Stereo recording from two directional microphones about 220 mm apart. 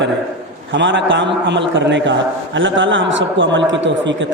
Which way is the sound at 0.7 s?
55° right (ahead or behind).